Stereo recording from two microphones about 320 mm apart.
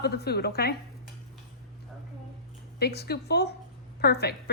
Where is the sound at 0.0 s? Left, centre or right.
Left.